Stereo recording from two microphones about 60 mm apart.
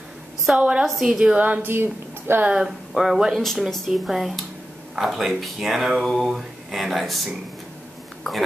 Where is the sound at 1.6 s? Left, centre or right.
Right.